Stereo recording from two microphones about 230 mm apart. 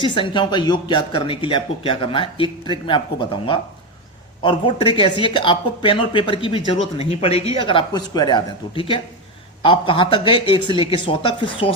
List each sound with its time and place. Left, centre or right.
0.0 s speech: left